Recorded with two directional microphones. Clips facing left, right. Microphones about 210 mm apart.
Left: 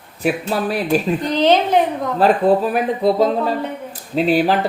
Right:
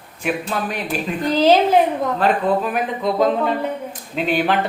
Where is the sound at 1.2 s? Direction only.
5° right (ahead or behind).